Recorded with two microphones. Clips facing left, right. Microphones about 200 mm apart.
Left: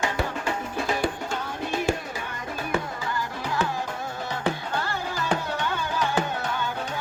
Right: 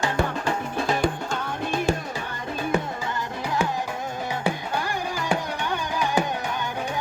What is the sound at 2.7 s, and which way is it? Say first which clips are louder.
Music: even; 20° right (ahead or behind).